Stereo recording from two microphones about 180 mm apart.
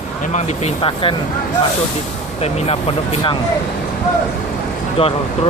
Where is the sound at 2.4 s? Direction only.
35° left (ahead or behind).